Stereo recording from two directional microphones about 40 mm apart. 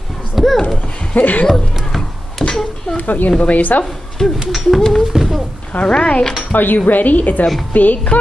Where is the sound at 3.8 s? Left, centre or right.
Centre.